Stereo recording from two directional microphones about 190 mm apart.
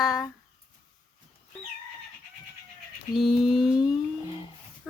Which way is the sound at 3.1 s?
Centre (ahead or behind).